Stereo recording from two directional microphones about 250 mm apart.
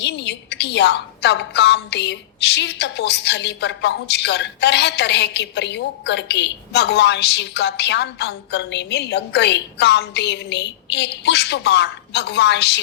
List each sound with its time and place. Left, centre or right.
0.0 s a woman's voice: left